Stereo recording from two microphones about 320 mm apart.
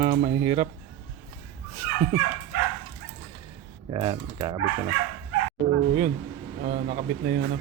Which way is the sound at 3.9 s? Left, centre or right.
Centre.